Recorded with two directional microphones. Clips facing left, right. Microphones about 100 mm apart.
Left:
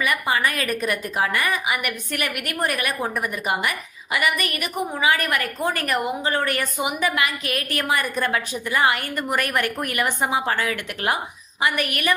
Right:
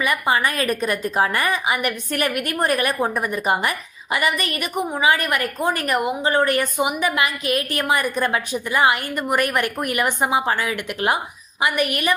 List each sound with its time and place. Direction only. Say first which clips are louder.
0.0 s a woman's voice: right 2 dB; 25° right (ahead or behind)